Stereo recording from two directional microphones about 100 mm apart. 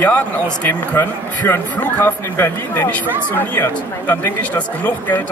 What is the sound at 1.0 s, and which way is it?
Speech, 25° left (ahead or behind).